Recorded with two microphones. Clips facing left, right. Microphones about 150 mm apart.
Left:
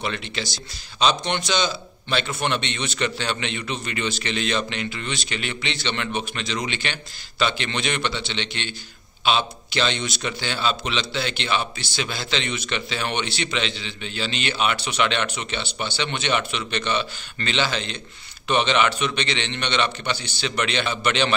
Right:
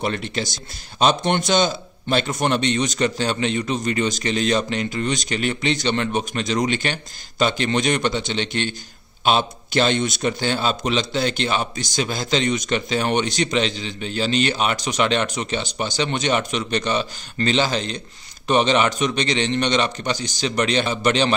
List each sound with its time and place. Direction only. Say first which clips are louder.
0.0 s a man's voice: right 4 dB; 45° right (ahead or behind)